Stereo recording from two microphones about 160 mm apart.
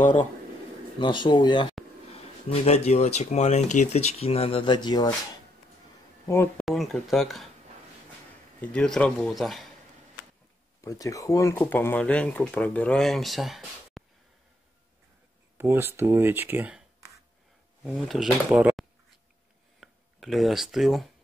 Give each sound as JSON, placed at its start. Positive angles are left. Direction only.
{"t": 0.0, "sound": "speech", "side_deg": 50}
{"t": 0.9, "sound": "speech", "side_deg": 30}
{"t": 2.5, "sound": "speech", "side_deg": 40}
{"t": 6.2, "sound": "speech", "side_deg": 15}
{"t": 6.6, "sound": "a man's voice", "side_deg": 0}
{"t": 8.5, "sound": "a man's voice", "side_deg": 5}
{"t": 10.8, "sound": "speech", "side_deg": 20}
{"t": 15.5, "sound": "speech", "side_deg": -15}
{"t": 17.8, "sound": "a man's voice", "side_deg": -5}